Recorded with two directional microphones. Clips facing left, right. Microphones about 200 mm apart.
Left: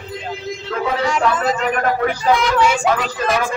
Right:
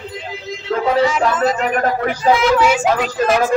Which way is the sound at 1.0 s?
5° right (ahead or behind).